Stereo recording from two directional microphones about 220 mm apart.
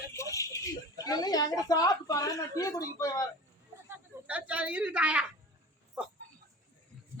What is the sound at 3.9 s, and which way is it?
A woman's voice, 5° right (ahead or behind).